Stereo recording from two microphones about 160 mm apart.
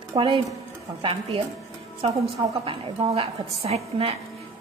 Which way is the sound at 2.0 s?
35° right (ahead or behind).